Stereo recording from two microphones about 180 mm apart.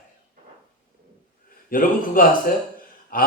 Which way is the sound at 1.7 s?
50° left (ahead or behind).